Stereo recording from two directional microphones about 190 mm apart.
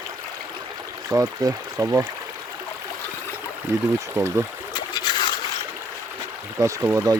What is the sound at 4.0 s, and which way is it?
Speech, 15° right (ahead or behind).